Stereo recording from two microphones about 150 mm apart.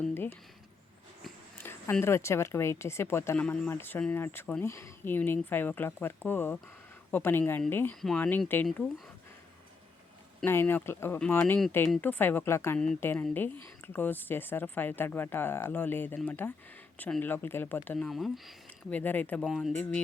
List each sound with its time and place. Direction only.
0.0 s a sound: 15° left (ahead or behind)
1.5 s speech: 15° left (ahead or behind)
10.4 s speech: 15° left (ahead or behind)
19.5 s speech: centre (ahead or behind)
19.7 s speech: 10° left (ahead or behind)